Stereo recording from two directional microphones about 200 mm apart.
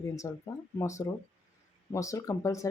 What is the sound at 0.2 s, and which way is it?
Speech, 15° left (ahead or behind).